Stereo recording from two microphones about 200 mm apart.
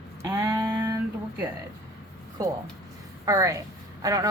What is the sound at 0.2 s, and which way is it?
Female singing, 10° right (ahead or behind).